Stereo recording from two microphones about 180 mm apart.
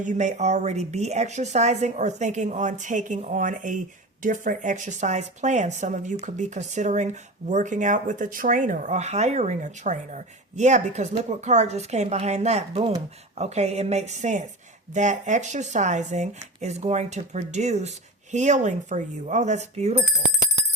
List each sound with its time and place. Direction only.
0.0 s speech: 45° right (ahead or behind)